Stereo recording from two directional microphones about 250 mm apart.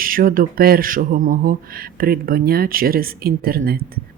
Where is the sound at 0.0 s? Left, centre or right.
Right.